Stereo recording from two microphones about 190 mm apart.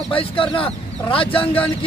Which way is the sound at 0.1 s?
30° left (ahead or behind).